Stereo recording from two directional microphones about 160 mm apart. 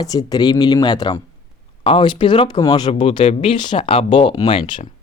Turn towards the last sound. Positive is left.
turn(degrees=35)  # may be behind; listen again after turning